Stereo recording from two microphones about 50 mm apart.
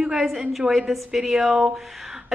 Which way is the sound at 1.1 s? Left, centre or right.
Centre.